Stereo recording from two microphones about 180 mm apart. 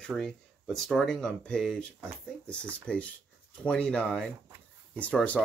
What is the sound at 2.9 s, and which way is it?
Speech, 5° left (ahead or behind).